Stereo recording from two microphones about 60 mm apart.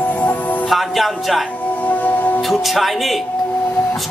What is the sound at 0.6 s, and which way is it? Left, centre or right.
Speech, centre.